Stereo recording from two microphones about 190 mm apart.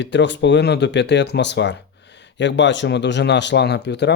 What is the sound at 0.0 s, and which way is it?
Speech, 70° left (ahead or behind).